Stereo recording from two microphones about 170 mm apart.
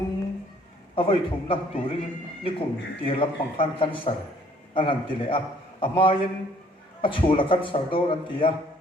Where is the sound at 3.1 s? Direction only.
30° left (ahead or behind).